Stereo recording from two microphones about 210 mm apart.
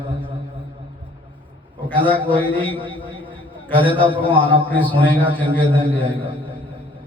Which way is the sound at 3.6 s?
10° left (ahead or behind).